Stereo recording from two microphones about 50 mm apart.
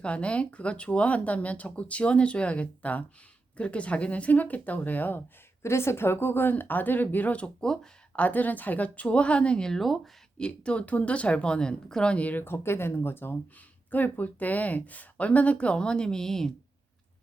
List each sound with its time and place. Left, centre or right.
0.0 s speech: left
5.6 s speech: left
7.6 s speech: centre
8.1 s speech: left; by 10.0 s centre
10.3 s speech: centre
12.1 s speech: left
12.4 s speech: left
13.9 s speech: left; by 16.5 s centre